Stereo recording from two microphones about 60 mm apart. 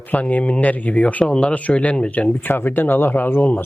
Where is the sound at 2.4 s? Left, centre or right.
Left.